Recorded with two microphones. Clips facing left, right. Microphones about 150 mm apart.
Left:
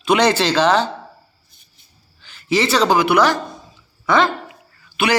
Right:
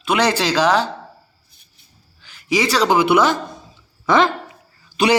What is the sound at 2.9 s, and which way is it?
A man's voice, 25° right (ahead or behind).